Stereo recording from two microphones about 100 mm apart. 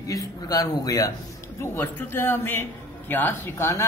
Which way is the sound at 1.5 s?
25° left (ahead or behind).